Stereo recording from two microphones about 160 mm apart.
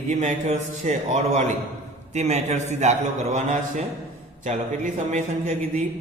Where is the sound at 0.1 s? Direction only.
45° right (ahead or behind).